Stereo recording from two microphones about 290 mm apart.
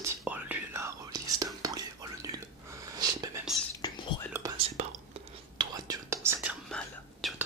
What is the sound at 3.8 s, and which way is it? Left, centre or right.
Whispering, centre.